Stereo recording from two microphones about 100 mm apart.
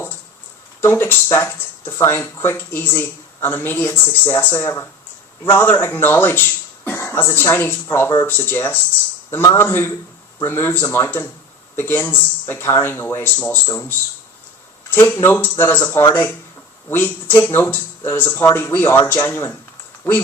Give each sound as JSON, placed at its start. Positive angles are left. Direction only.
{"t": 0.8, "sound": "speech", "side_deg": 25}
{"t": 14.8, "sound": "a sound", "side_deg": 25}
{"t": 15.2, "sound": "speech", "side_deg": 20}